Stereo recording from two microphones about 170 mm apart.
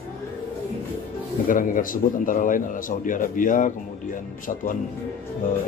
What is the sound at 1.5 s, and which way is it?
A man's voice, 55° left (ahead or behind).